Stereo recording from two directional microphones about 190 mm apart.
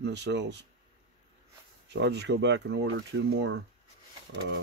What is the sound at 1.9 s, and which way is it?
Speech, 65° right (ahead or behind).